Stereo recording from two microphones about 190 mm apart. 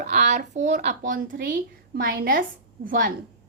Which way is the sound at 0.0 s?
40° right (ahead or behind).